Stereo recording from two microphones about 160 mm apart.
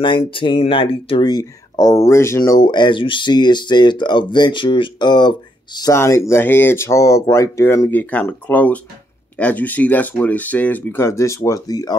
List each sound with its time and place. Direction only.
0.3 s speech: 35° left (ahead or behind)